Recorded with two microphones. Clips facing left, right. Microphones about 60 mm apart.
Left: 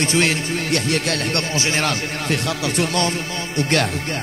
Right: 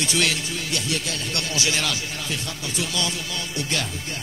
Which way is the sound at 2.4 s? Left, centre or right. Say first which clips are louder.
Left 9 dB; left.